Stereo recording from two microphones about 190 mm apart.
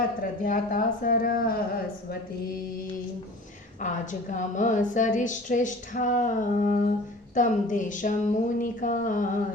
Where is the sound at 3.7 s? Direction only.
40° left (ahead or behind).